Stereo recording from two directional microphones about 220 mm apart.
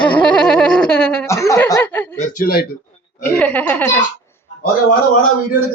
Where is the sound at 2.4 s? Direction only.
45° left (ahead or behind).